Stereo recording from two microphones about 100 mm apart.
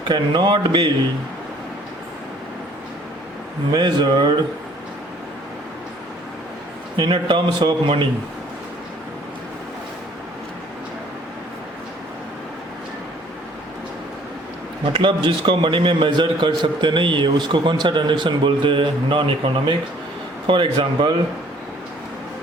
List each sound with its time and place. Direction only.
0.1 s a man's voice: 50° right (ahead or behind)
3.7 s a man's voice: 50° right (ahead or behind)
6.9 s a man's voice: 55° right (ahead or behind)
14.9 s a man's voice: 55° right (ahead or behind)